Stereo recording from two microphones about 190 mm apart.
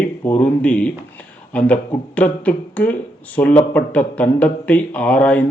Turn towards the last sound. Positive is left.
turn(degrees=5)  # may be behind; listen again after turning